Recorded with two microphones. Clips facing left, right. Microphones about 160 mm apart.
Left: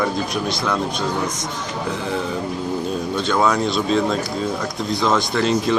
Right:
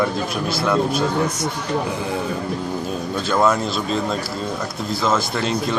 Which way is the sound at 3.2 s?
5° right (ahead or behind).